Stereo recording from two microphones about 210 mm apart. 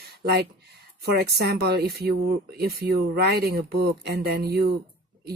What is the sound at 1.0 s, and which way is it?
Speech, 50° right (ahead or behind).